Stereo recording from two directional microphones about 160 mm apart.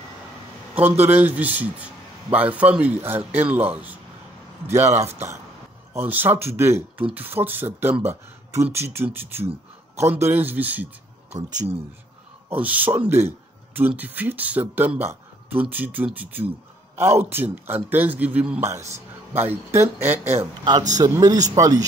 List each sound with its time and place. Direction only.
0.7 s speech: 10° right (ahead or behind)
4.9 s speech: 45° right (ahead or behind)
5.9 s speech: 10° right (ahead or behind)
11.3 s speech: 25° right (ahead or behind)
12.4 s speech: 10° right (ahead or behind)
19.7 s speech: 15° right (ahead or behind)